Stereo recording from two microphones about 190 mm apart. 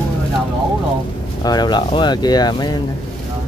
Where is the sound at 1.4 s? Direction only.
20° left (ahead or behind).